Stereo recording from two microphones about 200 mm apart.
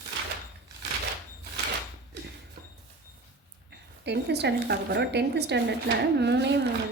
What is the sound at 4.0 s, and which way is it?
Speech, 60° right (ahead or behind).